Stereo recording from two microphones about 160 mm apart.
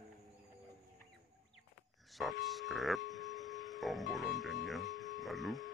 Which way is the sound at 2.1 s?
Centre (ahead or behind).